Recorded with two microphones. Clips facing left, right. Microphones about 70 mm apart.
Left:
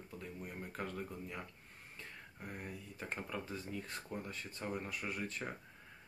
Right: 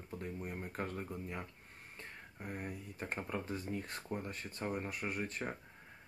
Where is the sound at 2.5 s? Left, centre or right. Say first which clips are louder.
Right 4 dB; right.